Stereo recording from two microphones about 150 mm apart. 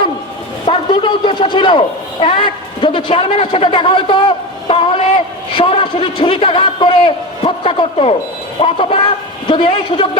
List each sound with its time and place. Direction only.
0.6 s a man's voice: 35° left (ahead or behind)